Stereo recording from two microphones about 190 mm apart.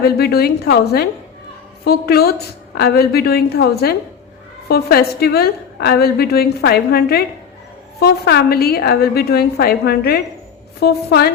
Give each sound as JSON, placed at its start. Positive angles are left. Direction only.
{"t": 0.0, "sound": "a woman's voice", "side_deg": 55}